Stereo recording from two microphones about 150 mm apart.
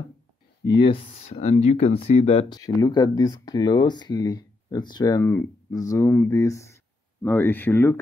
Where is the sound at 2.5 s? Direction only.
25° left (ahead or behind).